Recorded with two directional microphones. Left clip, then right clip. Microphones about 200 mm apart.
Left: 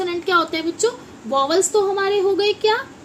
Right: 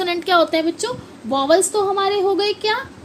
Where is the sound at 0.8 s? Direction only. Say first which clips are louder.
Left 4 dB; 25° right (ahead or behind).